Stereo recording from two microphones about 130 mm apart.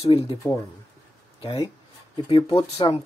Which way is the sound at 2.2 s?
40° left (ahead or behind).